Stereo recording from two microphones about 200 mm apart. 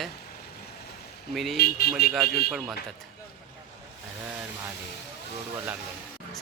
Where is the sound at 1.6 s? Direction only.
50° left (ahead or behind).